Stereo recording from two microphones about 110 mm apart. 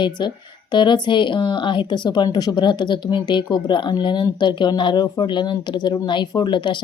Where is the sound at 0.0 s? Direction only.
45° left (ahead or behind).